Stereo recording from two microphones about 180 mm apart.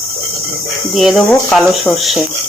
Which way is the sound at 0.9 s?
Centre (ahead or behind).